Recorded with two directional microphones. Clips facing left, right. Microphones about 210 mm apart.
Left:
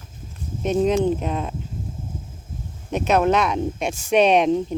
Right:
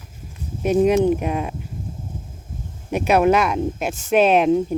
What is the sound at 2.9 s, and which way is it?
Speech, 10° right (ahead or behind).